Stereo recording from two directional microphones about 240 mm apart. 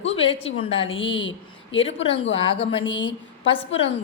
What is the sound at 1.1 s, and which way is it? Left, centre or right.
Speech, left.